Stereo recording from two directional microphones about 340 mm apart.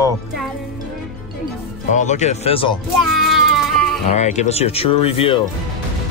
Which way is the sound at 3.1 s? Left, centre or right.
Centre.